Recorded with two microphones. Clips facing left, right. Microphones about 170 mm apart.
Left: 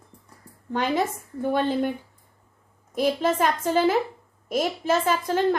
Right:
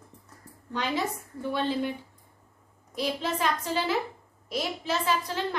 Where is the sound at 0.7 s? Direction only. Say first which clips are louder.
Left 5 dB; 50° left (ahead or behind).